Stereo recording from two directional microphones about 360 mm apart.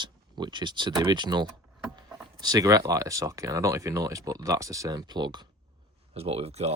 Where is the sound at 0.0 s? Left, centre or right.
Centre.